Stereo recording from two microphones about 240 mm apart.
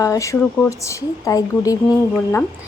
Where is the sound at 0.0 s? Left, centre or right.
Centre.